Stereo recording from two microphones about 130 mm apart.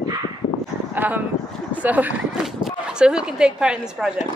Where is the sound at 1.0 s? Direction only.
15° right (ahead or behind).